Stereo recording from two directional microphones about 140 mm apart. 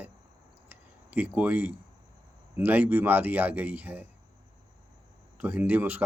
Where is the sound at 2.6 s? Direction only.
10° right (ahead or behind).